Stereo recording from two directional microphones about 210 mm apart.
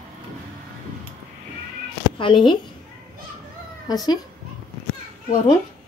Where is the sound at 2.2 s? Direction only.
25° left (ahead or behind).